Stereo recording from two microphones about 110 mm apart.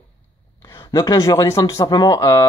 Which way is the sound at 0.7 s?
35° left (ahead or behind).